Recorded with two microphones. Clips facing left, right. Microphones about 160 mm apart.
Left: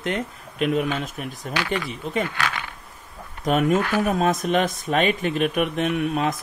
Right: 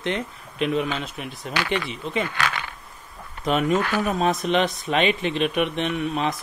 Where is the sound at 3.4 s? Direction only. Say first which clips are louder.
Left 1 dB; 50° left (ahead or behind).